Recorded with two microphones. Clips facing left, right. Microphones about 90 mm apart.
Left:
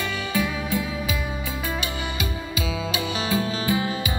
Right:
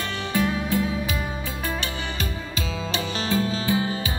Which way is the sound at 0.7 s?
5° left (ahead or behind).